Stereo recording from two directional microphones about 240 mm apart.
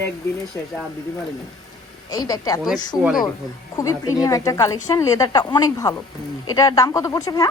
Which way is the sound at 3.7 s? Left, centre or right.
Centre.